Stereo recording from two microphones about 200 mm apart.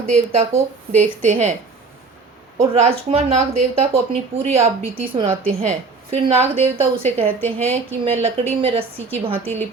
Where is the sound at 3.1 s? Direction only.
30° right (ahead or behind).